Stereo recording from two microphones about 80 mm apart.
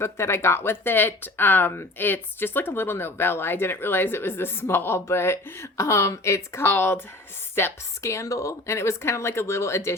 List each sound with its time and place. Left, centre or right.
0.0 s speech: left